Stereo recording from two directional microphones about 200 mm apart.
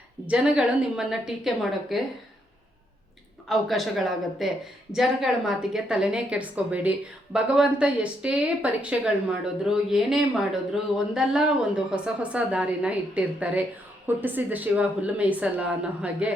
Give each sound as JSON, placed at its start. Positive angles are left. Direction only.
{"t": 0.3, "sound": "a woman's voice", "side_deg": -5}
{"t": 3.5, "sound": "a woman's voice", "side_deg": 0}